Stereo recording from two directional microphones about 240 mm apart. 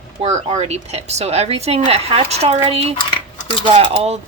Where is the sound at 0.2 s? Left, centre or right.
Right.